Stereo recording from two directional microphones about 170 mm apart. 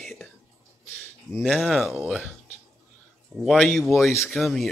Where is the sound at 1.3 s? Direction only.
Centre (ahead or behind).